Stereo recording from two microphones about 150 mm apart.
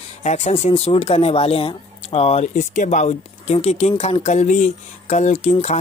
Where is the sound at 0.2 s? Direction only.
50° left (ahead or behind).